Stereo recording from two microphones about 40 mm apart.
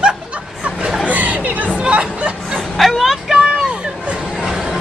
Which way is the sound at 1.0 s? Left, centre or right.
Right.